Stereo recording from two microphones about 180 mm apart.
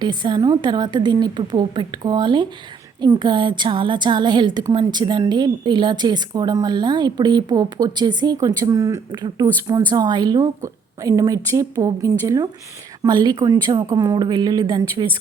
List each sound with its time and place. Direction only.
0.0 s a woman's voice: 25° right (ahead or behind)